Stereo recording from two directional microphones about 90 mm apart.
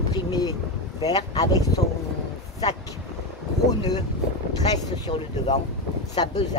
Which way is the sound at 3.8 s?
55° left (ahead or behind).